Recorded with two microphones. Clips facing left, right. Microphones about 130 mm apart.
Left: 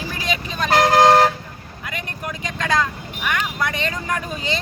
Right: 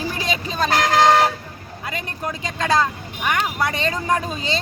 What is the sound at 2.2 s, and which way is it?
Speech, 35° right (ahead or behind).